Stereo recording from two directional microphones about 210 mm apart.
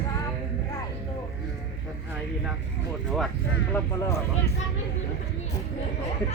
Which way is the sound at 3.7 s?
15° left (ahead or behind).